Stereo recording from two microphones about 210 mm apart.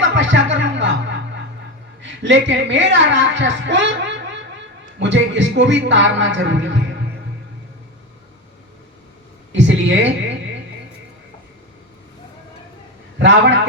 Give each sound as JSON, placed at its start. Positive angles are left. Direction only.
{"t": 0.0, "sound": "music", "side_deg": -60}
{"t": 2.0, "sound": "a woman's voice", "side_deg": -60}
{"t": 9.5, "sound": "a sound", "side_deg": -60}
{"t": 13.1, "sound": "a man's voice", "side_deg": -55}